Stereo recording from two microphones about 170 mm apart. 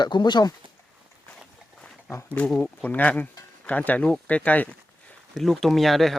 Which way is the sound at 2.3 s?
5° left (ahead or behind).